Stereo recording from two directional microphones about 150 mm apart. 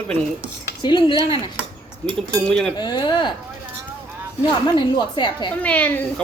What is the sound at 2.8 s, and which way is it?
Speech, 30° left (ahead or behind).